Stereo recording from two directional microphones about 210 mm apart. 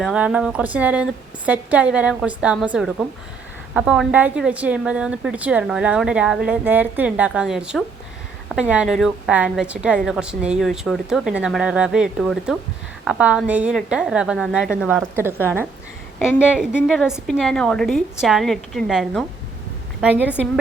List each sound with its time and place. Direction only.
0.0 s a woman's voice: 5° right (ahead or behind)